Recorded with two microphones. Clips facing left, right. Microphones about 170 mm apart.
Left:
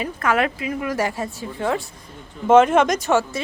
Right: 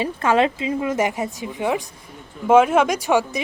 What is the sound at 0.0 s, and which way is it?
A woman's voice, 25° right (ahead or behind).